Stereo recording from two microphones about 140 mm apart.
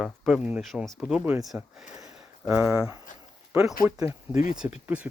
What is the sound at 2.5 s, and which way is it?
Speech, 5° right (ahead or behind).